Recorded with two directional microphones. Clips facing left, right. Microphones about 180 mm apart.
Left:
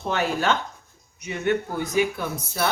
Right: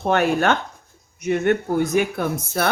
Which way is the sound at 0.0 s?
60° right (ahead or behind).